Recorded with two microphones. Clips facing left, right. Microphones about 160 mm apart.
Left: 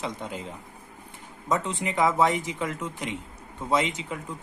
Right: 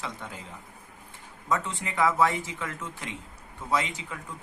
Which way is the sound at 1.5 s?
20° left (ahead or behind).